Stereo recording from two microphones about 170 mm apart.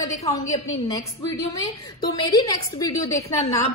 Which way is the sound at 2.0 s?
25° left (ahead or behind).